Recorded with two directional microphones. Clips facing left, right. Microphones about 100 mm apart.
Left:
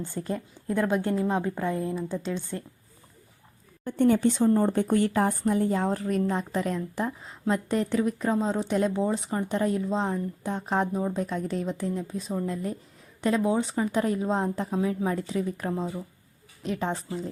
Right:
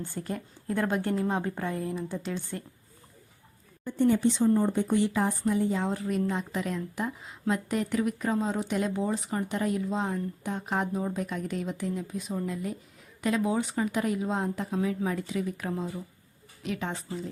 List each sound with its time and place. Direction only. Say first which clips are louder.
0.0 s speech: left 3 dB; 20° left (ahead or behind)
3.8 s a woman's voice: left 2 dB; 55° left (ahead or behind); by 17.2 s 30° left (ahead or behind)